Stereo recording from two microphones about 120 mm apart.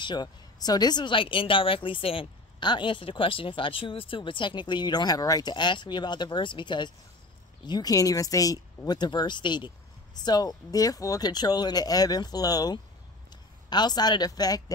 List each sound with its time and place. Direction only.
0.0 s speech: 35° left (ahead or behind)